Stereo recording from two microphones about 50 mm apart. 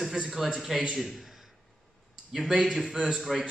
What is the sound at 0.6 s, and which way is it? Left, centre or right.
A man's voice, centre.